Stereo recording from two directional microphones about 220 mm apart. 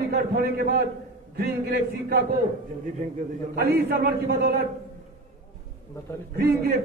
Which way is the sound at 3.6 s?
45° right (ahead or behind).